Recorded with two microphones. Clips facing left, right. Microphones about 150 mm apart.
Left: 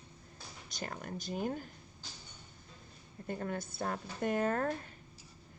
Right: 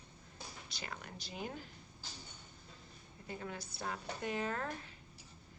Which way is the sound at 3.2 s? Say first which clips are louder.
Left 7 dB; 50° left (ahead or behind).